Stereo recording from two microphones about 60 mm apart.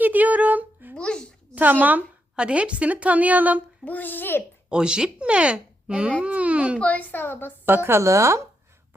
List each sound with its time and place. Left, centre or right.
0.0 s a sound: right
0.9 s a child's voice: centre
1.5 s a woman's voice: right
2.3 s a woman's voice: centre
3.8 s a woman's voice: left
4.7 s a woman's voice: centre
6.7 s a woman's voice: left
7.6 s a woman's voice: right
8.0 s speech: right